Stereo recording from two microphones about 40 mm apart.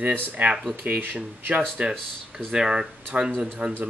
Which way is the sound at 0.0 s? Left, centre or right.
Right.